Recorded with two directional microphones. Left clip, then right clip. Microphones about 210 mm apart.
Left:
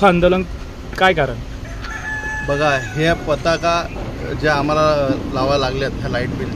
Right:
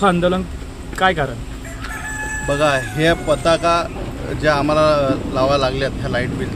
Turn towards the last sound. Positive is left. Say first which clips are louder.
# right 1 dB
turn(degrees=0)  # may be behind; listen again after turning